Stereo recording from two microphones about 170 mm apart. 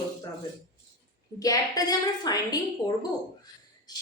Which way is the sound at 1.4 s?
20° left (ahead or behind).